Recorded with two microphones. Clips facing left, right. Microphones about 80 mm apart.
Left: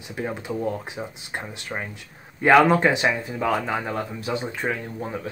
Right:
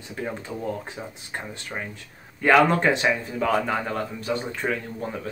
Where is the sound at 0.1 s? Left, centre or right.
Centre.